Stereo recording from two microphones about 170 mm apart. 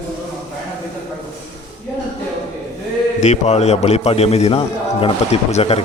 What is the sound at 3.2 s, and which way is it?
A man's voice, 40° left (ahead or behind).